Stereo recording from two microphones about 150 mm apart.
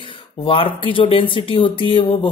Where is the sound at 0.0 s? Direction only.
35° left (ahead or behind).